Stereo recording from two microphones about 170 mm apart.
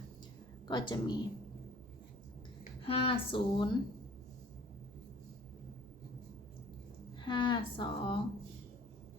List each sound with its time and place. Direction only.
0.7 s speech: 25° left (ahead or behind)
2.8 s speech: 35° left (ahead or behind)
7.2 s speech: 30° left (ahead or behind)